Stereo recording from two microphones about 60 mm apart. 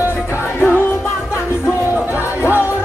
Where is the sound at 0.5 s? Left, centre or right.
Left.